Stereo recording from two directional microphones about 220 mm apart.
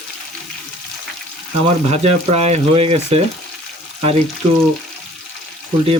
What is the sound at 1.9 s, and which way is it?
Speech, 30° right (ahead or behind).